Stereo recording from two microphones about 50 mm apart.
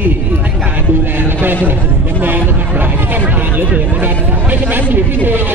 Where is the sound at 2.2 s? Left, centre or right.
Right.